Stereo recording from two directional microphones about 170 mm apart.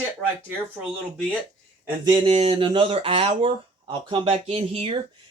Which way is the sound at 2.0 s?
25° right (ahead or behind).